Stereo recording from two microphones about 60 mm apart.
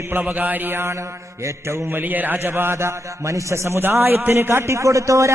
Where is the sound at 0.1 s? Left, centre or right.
Right.